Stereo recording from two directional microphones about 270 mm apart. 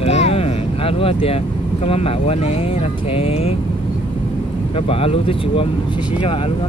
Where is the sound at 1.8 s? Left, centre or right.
Left.